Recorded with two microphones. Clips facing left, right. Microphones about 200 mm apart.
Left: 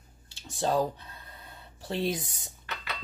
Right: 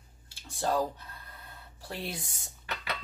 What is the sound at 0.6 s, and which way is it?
Speech, 15° left (ahead or behind).